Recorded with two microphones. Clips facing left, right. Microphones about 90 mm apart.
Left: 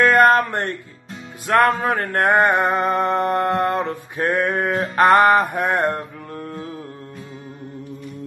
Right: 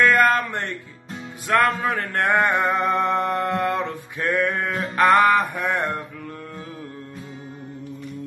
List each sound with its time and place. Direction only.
0.0 s music: 40° left (ahead or behind)